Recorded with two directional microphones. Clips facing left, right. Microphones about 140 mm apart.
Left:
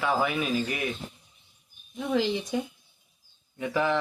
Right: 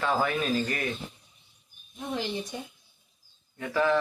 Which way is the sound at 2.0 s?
90° left.